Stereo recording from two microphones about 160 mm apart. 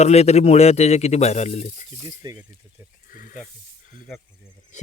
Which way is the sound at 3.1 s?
60° left (ahead or behind).